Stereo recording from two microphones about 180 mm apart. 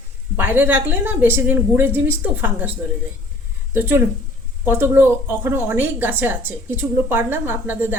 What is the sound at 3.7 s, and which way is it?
A woman's voice, 10° right (ahead or behind).